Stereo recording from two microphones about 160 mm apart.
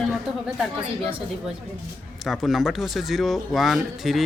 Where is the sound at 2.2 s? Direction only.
Centre (ahead or behind).